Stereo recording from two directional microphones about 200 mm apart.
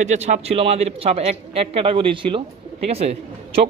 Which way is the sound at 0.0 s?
35° right (ahead or behind).